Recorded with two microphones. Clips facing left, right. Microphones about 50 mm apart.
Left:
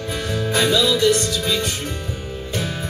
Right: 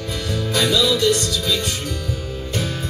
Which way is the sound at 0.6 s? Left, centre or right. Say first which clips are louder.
Even; centre.